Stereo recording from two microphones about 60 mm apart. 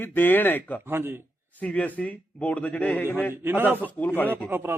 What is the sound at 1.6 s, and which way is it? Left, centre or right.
Speech, left.